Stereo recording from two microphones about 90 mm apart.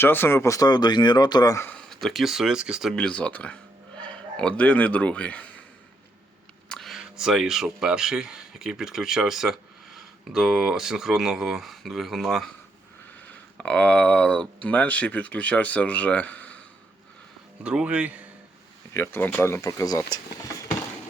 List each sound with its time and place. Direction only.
0.0 s speech: 25° left (ahead or behind); by 1.5 s 50° left (ahead or behind)
1.9 s speech: 5° left (ahead or behind)
2.9 s speech: 10° left (ahead or behind)
6.7 s speech: 5° left (ahead or behind)
13.2 s speech: 15° left (ahead or behind)
17.6 s speech: 15° right (ahead or behind)
18.9 s speech: 25° left (ahead or behind)
19.6 s speech: 40° left (ahead or behind)